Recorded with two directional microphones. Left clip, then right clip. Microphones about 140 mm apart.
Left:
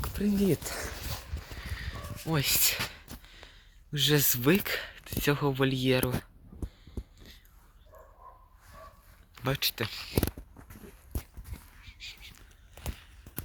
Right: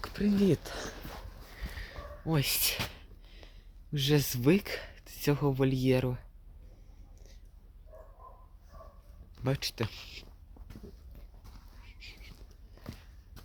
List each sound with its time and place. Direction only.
0.0 s a sound: 20° left (ahead or behind)
0.4 s speech: 5° left (ahead or behind)
1.6 s a sound: 5° right (ahead or behind)
3.5 s speech: centre (ahead or behind)
7.9 s dog: 50° left (ahead or behind)
9.4 s speech: 20° right (ahead or behind)
9.9 s speech: 35° right (ahead or behind)
11.9 s whispering: 30° right (ahead or behind)